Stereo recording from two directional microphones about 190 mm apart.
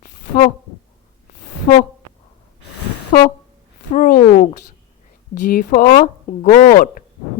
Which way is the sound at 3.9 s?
45° left (ahead or behind).